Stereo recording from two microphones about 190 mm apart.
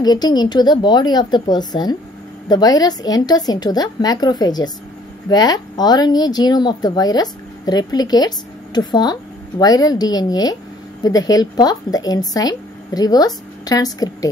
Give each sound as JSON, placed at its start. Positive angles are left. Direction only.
{"t": 0.0, "sound": "speech", "side_deg": 20}